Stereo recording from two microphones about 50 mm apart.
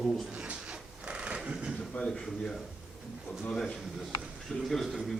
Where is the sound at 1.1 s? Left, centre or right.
Centre.